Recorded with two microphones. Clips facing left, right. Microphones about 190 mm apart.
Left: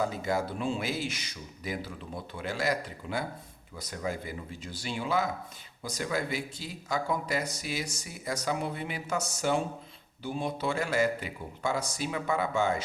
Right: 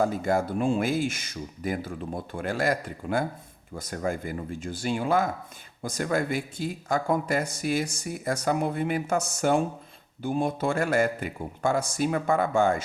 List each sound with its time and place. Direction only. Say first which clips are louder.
0.0 s speech: right 5 dB; 50° right (ahead or behind)